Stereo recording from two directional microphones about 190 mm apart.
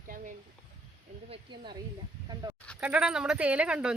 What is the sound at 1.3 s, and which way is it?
Speech, 25° right (ahead or behind).